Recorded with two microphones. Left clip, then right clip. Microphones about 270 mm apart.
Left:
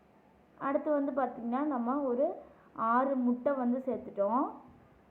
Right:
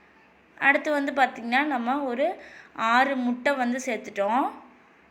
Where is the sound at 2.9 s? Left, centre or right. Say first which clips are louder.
Right 7 dB; centre.